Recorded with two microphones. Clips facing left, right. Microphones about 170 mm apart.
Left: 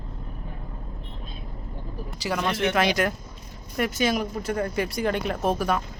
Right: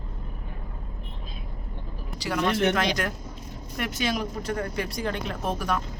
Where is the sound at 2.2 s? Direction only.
5° left (ahead or behind).